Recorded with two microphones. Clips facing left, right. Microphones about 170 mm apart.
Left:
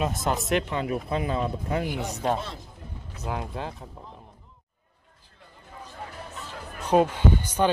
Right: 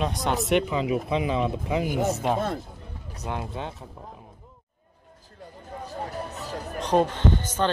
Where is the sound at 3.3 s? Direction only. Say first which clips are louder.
Even; centre (ahead or behind).